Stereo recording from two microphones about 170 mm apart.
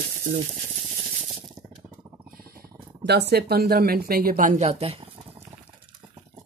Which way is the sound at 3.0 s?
75° right (ahead or behind).